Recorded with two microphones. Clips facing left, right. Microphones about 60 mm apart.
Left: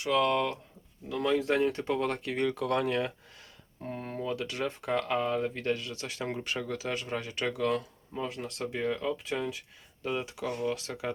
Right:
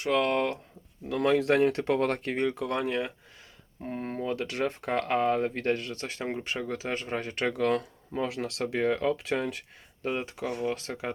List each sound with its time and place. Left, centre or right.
0.0 s speech: right
1.0 s speech: right
2.3 s speech: right
3.8 s speech: right
6.2 s speech: right
8.3 s speech: right
8.7 s speech: right
9.3 s speech: right
10.0 s speech: right
10.5 s speech: right
10.8 s speech: right